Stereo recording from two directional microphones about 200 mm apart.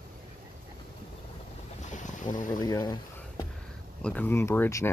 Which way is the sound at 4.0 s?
5° left (ahead or behind).